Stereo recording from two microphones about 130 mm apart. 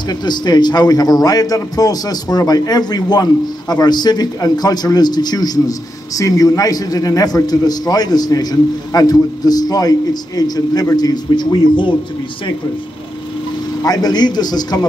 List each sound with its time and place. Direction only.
0.1 s a man's voice: 35° left (ahead or behind)
13.8 s a man's voice: 30° left (ahead or behind)